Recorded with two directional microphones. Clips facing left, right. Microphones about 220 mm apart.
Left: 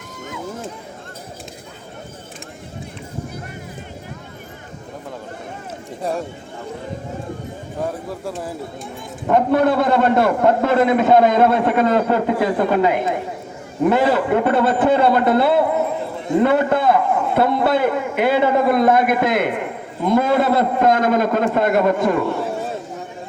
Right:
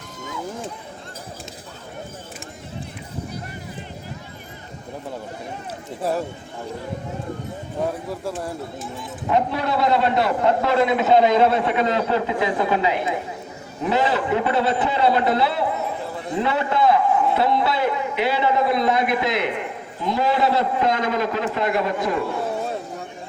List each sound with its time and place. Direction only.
6.0 s speech: 5° right (ahead or behind)
8.2 s speech: centre (ahead or behind)
9.2 s a man's voice: 50° left (ahead or behind)